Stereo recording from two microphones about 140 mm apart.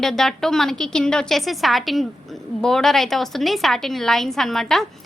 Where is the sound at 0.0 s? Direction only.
Centre (ahead or behind).